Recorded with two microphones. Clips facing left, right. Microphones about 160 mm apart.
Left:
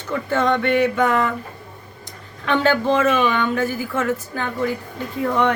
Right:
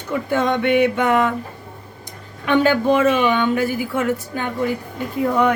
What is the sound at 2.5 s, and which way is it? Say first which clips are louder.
Speech: right 2 dB; 15° right (ahead or behind).